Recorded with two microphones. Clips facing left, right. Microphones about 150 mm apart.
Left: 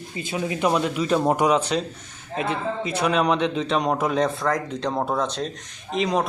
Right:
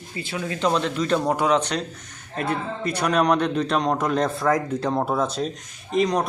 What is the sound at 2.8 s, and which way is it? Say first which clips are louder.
A man's voice: right 2 dB; 5° left (ahead or behind).